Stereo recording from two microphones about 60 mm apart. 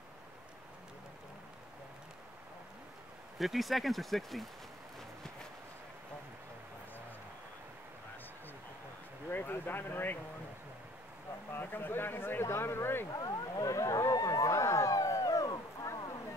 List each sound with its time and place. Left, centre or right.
3.3 s speech: centre
9.3 s speech: left
11.5 s speech: left
13.1 s a sound: left